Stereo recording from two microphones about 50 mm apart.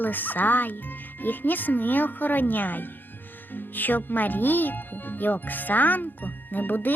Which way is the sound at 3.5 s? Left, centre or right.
Left.